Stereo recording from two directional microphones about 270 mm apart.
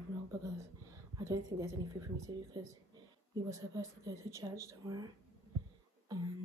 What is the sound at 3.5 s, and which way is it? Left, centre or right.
Speech, centre.